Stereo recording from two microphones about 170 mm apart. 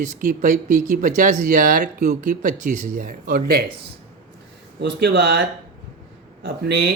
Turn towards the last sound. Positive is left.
turn(degrees=-75)  # may be behind; listen again after turning